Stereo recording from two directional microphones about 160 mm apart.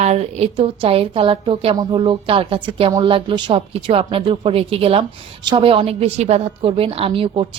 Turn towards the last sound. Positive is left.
turn(degrees=-35)  # may be behind; listen again after turning